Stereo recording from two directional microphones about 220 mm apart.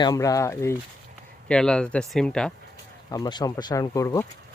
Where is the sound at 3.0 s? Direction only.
15° left (ahead or behind).